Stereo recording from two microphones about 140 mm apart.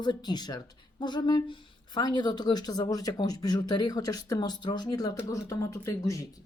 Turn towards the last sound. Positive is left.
turn(degrees=20)  # may be behind; listen again after turning